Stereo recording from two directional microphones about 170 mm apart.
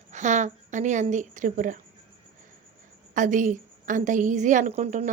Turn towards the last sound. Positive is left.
turn(degrees=-45)  # may be behind; listen again after turning